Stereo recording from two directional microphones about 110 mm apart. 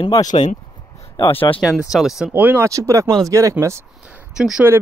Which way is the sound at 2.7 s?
30° right (ahead or behind).